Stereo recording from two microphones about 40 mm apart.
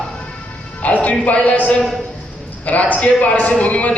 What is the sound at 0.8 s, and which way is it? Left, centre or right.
A woman's voice, left.